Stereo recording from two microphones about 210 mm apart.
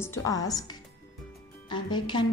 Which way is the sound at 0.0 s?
15° left (ahead or behind).